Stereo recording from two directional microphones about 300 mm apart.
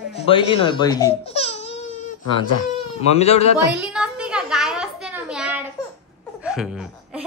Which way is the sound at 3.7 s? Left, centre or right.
Centre.